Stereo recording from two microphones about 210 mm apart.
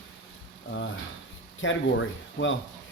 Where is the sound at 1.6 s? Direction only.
65° left (ahead or behind).